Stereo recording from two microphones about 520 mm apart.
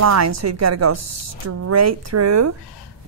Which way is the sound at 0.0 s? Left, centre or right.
Right.